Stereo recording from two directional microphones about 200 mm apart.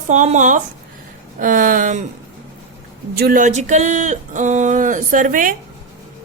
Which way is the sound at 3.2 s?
45° right (ahead or behind).